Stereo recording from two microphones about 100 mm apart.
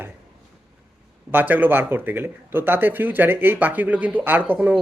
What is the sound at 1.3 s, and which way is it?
Speech, 20° right (ahead or behind).